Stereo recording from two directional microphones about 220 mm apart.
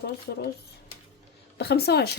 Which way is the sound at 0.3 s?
45° left (ahead or behind).